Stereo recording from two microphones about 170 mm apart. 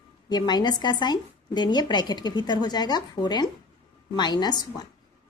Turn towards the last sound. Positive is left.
turn(degrees=25)  # may be behind; listen again after turning